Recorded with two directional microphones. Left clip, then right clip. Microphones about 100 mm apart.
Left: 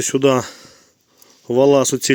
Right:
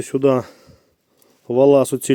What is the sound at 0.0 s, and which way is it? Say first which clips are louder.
Speech: left 2 dB; 15° right (ahead or behind).